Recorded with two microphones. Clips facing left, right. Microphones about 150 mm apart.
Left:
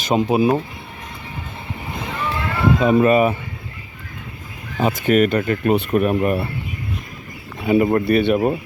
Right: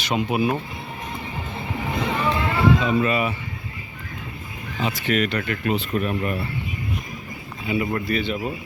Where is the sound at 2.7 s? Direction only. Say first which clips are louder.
Left 7 dB; 50° left (ahead or behind).